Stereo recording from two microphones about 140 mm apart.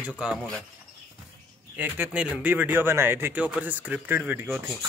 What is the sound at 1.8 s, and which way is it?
Speech, 15° right (ahead or behind).